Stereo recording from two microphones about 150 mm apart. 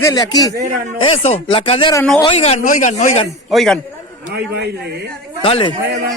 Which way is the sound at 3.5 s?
Centre (ahead or behind).